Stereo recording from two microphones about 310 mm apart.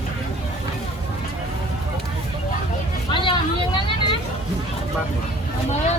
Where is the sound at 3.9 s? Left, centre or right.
Centre.